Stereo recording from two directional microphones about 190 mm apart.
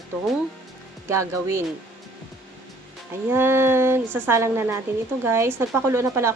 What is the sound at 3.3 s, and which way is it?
A woman's voice, 10° right (ahead or behind).